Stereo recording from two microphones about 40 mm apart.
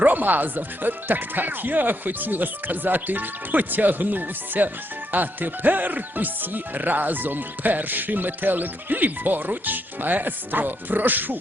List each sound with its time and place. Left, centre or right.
0.0 s speech: right